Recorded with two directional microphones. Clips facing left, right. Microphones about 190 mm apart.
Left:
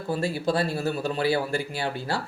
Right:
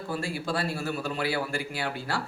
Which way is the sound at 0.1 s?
25° left (ahead or behind).